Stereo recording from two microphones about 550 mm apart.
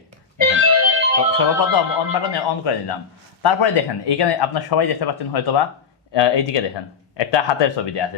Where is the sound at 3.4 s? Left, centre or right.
Left.